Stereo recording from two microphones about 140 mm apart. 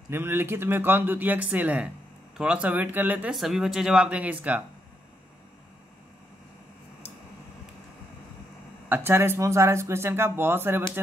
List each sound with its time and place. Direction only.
0.1 s speech: 15° right (ahead or behind)
8.8 s speech: 15° right (ahead or behind)